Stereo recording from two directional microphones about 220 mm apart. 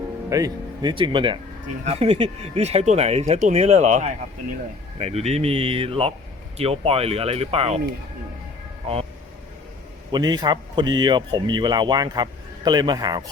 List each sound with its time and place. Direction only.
0.3 s a man's voice: 15° right (ahead or behind)
10.1 s a man's voice: 20° right (ahead or behind)